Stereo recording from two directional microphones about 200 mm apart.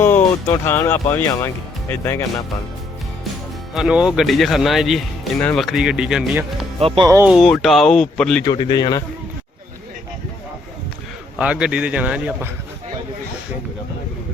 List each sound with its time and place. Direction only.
0.5 s speech: 10° left (ahead or behind)
3.8 s speech: 5° right (ahead or behind)
6.7 s speech: 25° right (ahead or behind)
7.3 s speech: centre (ahead or behind)
8.4 s a man's voice: 20° left (ahead or behind)
11.3 s speech: 5° right (ahead or behind)